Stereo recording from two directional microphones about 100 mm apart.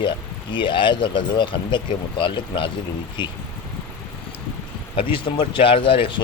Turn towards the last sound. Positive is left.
turn(degrees=60)  # may be behind; listen again after turning